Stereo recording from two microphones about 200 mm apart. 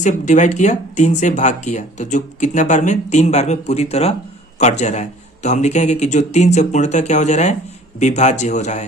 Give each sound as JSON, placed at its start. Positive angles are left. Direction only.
{"t": 0.0, "sound": "speech", "side_deg": 35}